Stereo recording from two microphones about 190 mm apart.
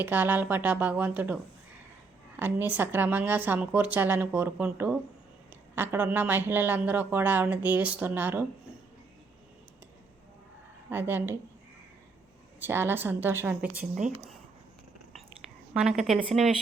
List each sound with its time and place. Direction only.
0.0 s speech: 10° right (ahead or behind)
10.8 s speech: 10° right (ahead or behind)
12.5 s speech: 10° right (ahead or behind)
13.9 s speech: 40° right (ahead or behind)
15.7 s speech: 5° right (ahead or behind)